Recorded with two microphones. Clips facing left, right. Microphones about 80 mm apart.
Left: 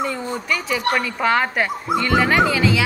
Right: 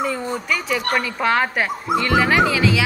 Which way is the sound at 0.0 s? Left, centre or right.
Centre.